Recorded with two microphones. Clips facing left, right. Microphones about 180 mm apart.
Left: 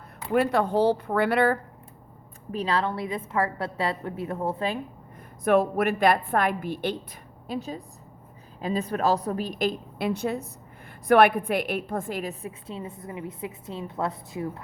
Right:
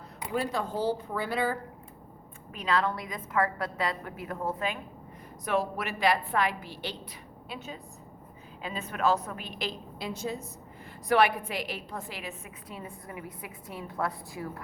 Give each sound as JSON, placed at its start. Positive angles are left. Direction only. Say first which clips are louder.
{"t": 0.3, "sound": "speech", "louder": "left 8 dB", "side_deg": 65}
{"t": 2.5, "sound": "a woman's voice", "louder": "left 2 dB", "side_deg": 30}
{"t": 5.5, "sound": "a woman's voice", "louder": "left 9 dB", "side_deg": 50}
{"t": 7.4, "sound": "a woman's voice", "louder": "left 9 dB", "side_deg": 40}